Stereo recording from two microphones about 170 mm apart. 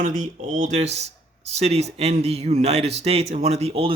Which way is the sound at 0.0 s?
50° right (ahead or behind).